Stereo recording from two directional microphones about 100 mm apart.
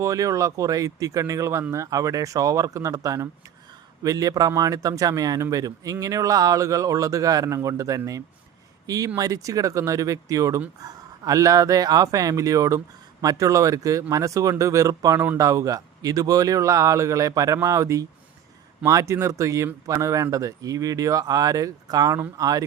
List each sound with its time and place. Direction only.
0.0 s speech: 35° right (ahead or behind)